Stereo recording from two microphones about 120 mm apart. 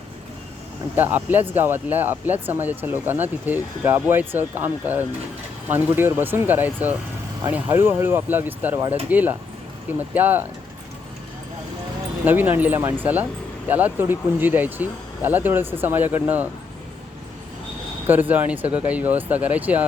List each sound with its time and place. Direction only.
0.9 s speech: 15° right (ahead or behind)
12.2 s speech: 15° right (ahead or behind)
18.0 s speech: 15° right (ahead or behind)